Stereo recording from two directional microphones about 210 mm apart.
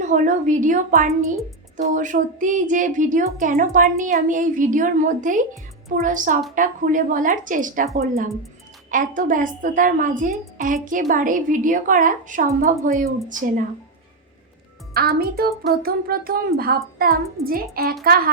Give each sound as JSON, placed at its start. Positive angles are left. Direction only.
{"t": 0.0, "sound": "a woman's voice", "side_deg": -35}
{"t": 8.9, "sound": "a woman's voice", "side_deg": -40}
{"t": 14.9, "sound": "a woman's voice", "side_deg": -45}